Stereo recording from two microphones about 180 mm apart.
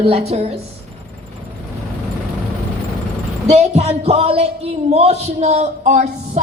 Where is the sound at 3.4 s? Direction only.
35° right (ahead or behind).